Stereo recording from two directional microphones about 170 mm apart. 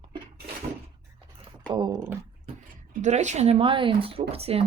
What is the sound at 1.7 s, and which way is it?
Speech, 30° right (ahead or behind).